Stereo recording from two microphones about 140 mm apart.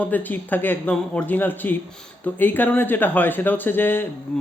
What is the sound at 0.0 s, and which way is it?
Speech, 10° left (ahead or behind).